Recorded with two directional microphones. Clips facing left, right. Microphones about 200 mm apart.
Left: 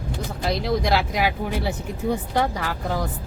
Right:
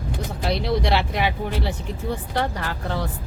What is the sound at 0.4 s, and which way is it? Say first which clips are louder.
Speech: even; centre (ahead or behind).